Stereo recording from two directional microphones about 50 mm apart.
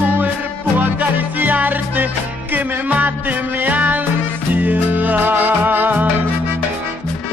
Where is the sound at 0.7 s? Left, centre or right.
Right.